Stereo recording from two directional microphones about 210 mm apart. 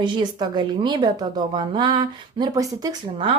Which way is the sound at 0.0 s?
20° right (ahead or behind).